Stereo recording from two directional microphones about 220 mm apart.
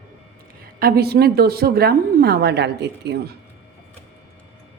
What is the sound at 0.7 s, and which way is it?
Speech, 40° right (ahead or behind).